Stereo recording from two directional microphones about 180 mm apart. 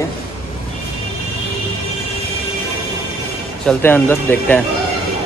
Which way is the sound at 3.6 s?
10° left (ahead or behind).